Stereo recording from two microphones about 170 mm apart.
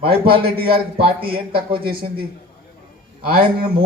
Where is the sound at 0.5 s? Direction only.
65° right (ahead or behind).